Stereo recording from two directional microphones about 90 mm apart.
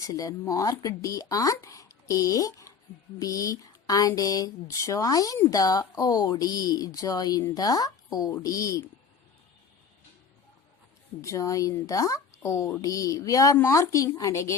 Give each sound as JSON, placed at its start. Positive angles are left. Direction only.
{"t": 0.1, "sound": "speech", "side_deg": 40}
{"t": 11.2, "sound": "speech", "side_deg": 35}